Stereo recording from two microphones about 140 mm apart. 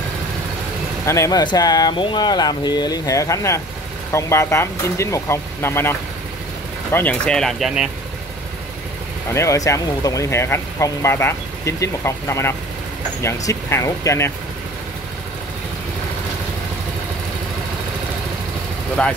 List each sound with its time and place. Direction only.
1.0 s speech: 20° left (ahead or behind); by 7.9 s 5° right (ahead or behind)
9.3 s speech: 20° left (ahead or behind)
19.0 s speech: 5° left (ahead or behind)